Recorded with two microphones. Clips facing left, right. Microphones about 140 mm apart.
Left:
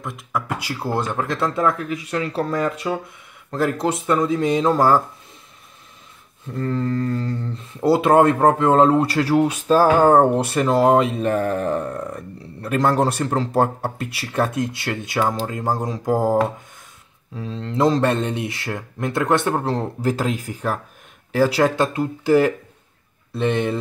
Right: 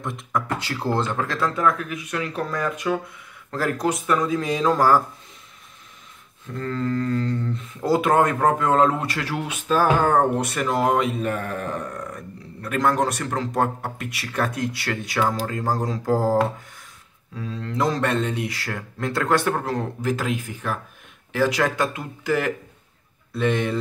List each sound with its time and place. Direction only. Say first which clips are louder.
0.0 s speech: even; 5° left (ahead or behind); by 5.0 s 25° left (ahead or behind)
6.6 s speech: left 2 dB; 20° left (ahead or behind)
17.4 s speech: left 4 dB; 25° left (ahead or behind)